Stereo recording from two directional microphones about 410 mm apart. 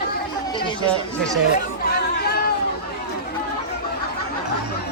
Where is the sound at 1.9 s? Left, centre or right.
Left.